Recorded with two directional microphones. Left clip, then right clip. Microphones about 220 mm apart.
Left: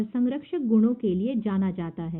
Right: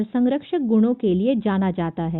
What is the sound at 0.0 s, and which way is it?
A woman's voice, 40° right (ahead or behind).